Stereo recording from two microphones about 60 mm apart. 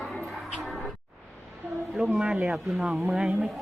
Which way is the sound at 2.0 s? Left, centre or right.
Centre.